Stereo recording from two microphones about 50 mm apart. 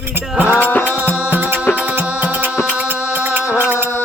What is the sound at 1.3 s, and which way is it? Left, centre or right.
Music, right.